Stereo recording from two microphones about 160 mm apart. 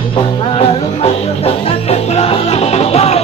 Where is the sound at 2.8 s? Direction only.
40° left (ahead or behind).